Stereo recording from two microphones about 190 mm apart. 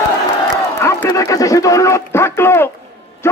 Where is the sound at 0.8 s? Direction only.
15° left (ahead or behind).